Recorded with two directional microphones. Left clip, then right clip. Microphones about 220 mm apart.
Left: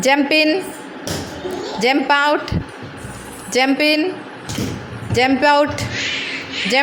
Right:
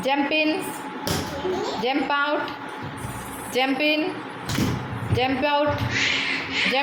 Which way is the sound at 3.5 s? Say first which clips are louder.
Left 6 dB; 40° left (ahead or behind).